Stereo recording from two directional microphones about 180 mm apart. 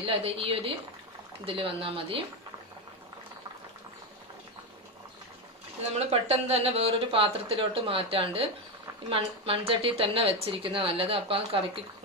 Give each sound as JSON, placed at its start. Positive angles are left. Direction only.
{"t": 0.0, "sound": "a woman's voice", "side_deg": -30}
{"t": 5.9, "sound": "a woman's voice", "side_deg": -35}